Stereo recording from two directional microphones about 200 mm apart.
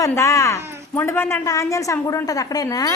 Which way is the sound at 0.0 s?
15° left (ahead or behind).